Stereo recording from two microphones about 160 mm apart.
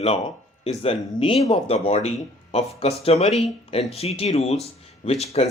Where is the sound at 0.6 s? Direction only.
40° left (ahead or behind).